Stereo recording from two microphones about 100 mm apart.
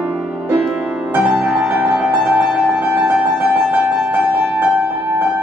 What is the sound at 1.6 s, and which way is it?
Music, 15° right (ahead or behind).